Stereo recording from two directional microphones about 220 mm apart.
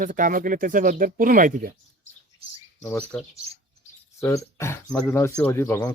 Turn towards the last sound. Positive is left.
turn(degrees=10)  # may be behind; listen again after turning